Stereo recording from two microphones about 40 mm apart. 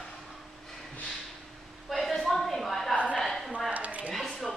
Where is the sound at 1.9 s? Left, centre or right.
Centre.